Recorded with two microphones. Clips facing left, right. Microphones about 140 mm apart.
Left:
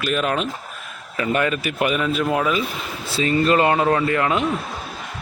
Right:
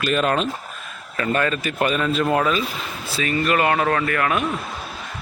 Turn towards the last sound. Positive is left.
turn(degrees=20)  # may be behind; listen again after turning